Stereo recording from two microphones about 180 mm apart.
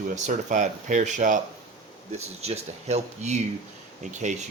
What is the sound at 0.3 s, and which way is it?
Speech, 45° right (ahead or behind).